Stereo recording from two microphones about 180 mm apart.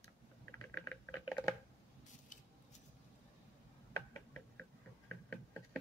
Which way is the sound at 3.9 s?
10° left (ahead or behind).